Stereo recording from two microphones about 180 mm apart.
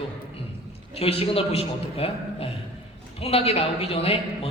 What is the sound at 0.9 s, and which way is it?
A man's voice, 30° left (ahead or behind).